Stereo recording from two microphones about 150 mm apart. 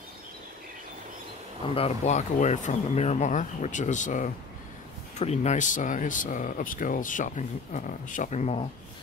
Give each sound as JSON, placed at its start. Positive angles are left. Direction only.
{"t": 1.8, "sound": "speech", "side_deg": 45}